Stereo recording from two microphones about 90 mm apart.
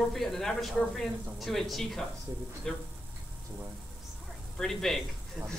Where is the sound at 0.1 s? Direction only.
5° left (ahead or behind).